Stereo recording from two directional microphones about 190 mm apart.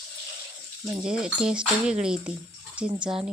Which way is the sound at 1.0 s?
5° right (ahead or behind).